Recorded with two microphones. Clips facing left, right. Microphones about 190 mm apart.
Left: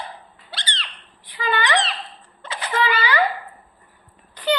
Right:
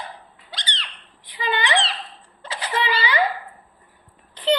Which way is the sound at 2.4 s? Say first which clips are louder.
Left 2 dB; 30° right (ahead or behind).